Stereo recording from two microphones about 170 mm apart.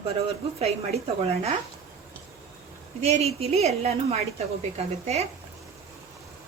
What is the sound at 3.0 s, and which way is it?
A woman's voice, 40° right (ahead or behind).